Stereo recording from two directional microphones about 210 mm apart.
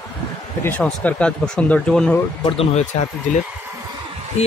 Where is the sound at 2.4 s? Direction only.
25° left (ahead or behind).